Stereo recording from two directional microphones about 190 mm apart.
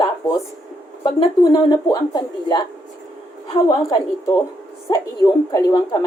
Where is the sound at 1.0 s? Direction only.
25° left (ahead or behind).